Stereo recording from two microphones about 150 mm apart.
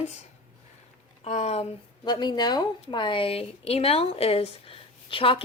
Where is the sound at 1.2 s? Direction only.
50° left (ahead or behind).